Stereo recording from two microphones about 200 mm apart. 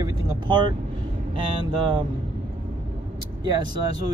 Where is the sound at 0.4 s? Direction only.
25° right (ahead or behind).